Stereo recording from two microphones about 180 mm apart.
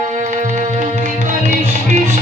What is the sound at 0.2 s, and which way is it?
Music, 40° right (ahead or behind).